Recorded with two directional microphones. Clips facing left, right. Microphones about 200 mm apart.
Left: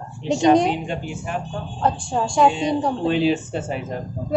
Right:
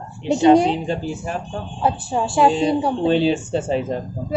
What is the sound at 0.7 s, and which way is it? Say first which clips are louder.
Speech: right 3 dB; 35° right (ahead or behind).